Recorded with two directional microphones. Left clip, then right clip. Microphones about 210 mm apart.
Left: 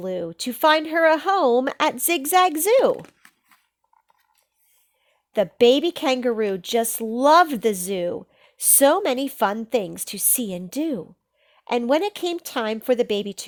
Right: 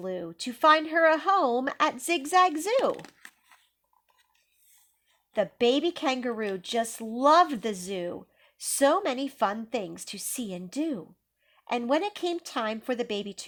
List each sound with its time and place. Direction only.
0.0 s speech: 55° left (ahead or behind)
3.1 s a sound: centre (ahead or behind)
5.3 s speech: 55° left (ahead or behind)